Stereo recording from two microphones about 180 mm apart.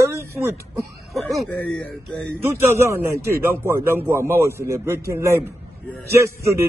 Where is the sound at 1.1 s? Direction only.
5° left (ahead or behind).